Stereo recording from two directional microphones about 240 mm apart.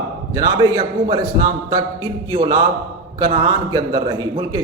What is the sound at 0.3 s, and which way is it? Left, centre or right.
Speech, centre.